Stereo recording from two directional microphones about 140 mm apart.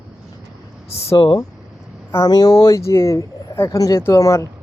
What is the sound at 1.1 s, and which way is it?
A man's voice, 30° left (ahead or behind).